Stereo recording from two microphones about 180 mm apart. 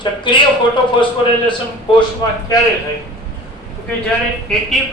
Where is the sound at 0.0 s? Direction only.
25° left (ahead or behind).